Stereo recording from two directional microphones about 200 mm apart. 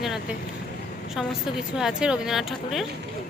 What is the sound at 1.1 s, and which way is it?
Speech, centre (ahead or behind).